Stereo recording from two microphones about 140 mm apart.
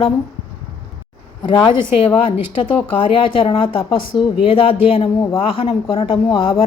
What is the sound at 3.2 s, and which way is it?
Speech, 40° left (ahead or behind).